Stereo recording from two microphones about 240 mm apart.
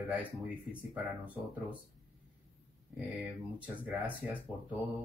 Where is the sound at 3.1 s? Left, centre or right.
Centre.